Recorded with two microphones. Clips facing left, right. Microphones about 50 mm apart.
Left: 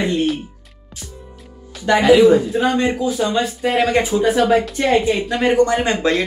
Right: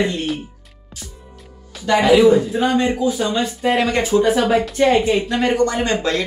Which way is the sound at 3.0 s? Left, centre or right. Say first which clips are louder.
Left 1 dB; centre.